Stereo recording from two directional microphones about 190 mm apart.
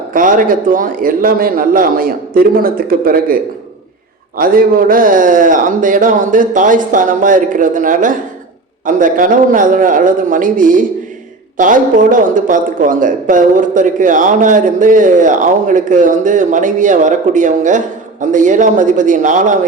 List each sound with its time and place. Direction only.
0.1 s a man's voice: 45° right (ahead or behind)